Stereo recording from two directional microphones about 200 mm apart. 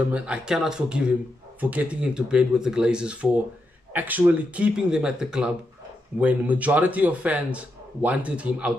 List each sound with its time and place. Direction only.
0.1 s speech: 5° right (ahead or behind)